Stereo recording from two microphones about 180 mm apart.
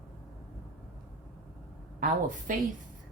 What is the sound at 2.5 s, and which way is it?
Speech, 45° right (ahead or behind).